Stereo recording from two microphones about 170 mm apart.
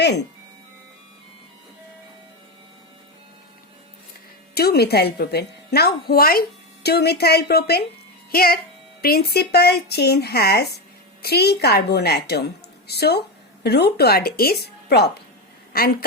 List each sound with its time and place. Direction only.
0.0 s speech: 80° left
4.5 s a woman's voice: 65° left (ahead or behind)
6.8 s a woman's voice: 70° left (ahead or behind)
15.7 s a woman's voice: 60° left (ahead or behind)